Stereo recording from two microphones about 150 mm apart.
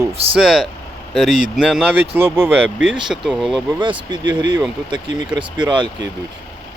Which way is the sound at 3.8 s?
30° right (ahead or behind).